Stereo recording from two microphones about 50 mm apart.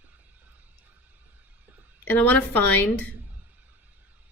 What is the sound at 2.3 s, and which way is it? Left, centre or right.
Speech, left.